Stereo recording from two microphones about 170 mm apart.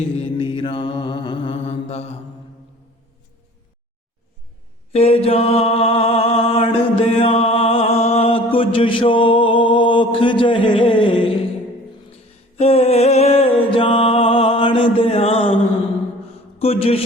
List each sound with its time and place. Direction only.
0.2 s mantra: 30° left (ahead or behind)
4.9 s mantra: 35° left (ahead or behind)
12.5 s music: 35° left (ahead or behind)
16.6 s a man's voice: 35° left (ahead or behind)